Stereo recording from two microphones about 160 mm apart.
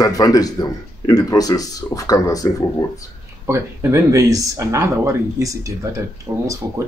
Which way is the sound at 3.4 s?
15° right (ahead or behind).